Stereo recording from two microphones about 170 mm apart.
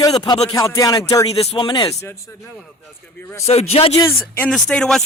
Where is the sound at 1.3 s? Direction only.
35° left (ahead or behind); by 3.4 s 15° left (ahead or behind).